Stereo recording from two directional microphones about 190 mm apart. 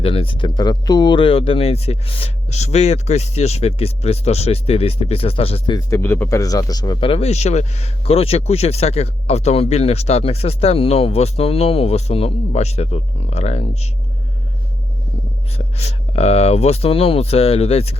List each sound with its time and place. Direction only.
0.0 s speech: 30° left (ahead or behind)
6.0 s speech: 10° left (ahead or behind); by 13.9 s 35° left (ahead or behind)
15.5 s speech: 35° left (ahead or behind)